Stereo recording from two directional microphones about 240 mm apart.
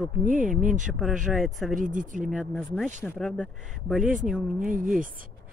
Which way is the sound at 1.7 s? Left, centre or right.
Right.